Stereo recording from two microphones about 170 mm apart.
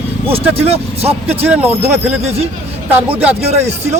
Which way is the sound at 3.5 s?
40° right (ahead or behind).